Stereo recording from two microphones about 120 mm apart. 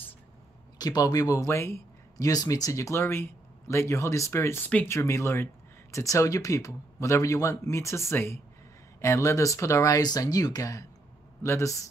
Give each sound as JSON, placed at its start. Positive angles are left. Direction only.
{"t": 0.7, "sound": "speech", "side_deg": 35}